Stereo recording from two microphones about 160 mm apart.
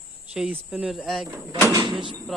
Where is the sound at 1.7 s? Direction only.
25° right (ahead or behind).